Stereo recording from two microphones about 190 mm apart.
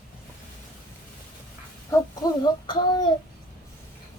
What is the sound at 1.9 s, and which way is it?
Speech, 20° left (ahead or behind).